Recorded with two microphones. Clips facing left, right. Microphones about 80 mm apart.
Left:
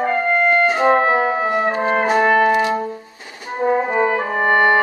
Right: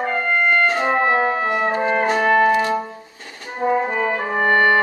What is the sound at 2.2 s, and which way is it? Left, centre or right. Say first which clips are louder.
Music: left 1 dB; centre.